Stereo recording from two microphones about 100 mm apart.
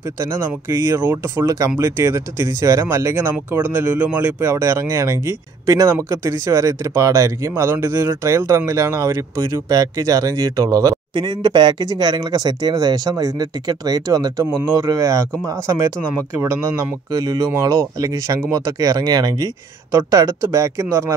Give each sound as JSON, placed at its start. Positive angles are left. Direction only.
{"t": 0.4, "sound": "speech", "side_deg": -30}
{"t": 11.1, "sound": "speech", "side_deg": -50}
{"t": 16.6, "sound": "speech", "side_deg": -40}